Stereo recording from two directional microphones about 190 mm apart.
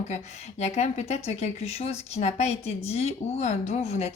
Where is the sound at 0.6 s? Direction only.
35° left (ahead or behind).